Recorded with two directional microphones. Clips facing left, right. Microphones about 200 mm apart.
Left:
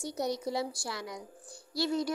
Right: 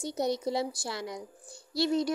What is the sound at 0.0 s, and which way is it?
A woman's voice, 25° right (ahead or behind).